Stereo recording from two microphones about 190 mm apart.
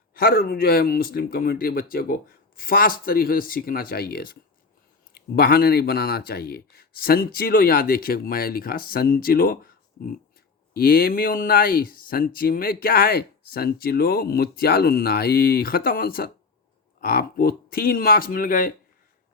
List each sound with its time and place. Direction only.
0.1 s speech: 50° left (ahead or behind)